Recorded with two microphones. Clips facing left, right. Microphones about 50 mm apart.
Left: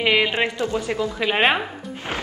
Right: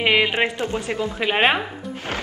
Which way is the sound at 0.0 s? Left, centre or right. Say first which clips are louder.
Right 1 dB; centre.